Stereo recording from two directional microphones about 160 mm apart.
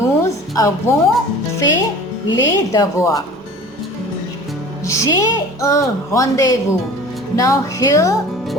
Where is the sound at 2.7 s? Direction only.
20° left (ahead or behind).